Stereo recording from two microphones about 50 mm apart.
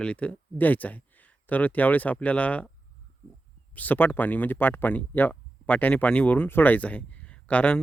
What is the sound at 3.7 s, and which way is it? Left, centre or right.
Speech, left.